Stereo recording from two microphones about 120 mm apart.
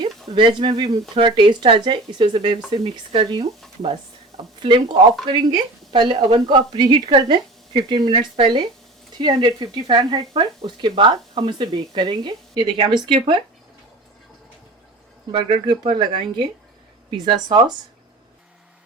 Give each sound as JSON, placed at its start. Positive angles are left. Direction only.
{"t": 0.3, "sound": "speech", "side_deg": -45}
{"t": 4.6, "sound": "speech", "side_deg": -40}
{"t": 15.3, "sound": "speech", "side_deg": -40}
{"t": 17.5, "sound": "speech", "side_deg": -40}